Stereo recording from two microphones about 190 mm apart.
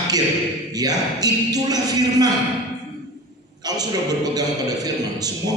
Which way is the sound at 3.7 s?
20° right (ahead or behind).